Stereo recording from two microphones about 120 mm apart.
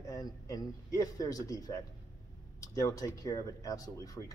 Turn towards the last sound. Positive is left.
turn(degrees=30)  # may be behind; listen again after turning